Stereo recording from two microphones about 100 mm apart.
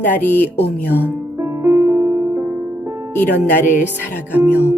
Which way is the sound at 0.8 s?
15° right (ahead or behind).